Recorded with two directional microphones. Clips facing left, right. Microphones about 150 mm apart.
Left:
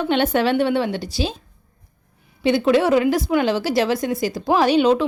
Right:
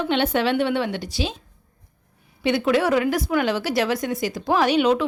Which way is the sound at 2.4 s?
30° left (ahead or behind).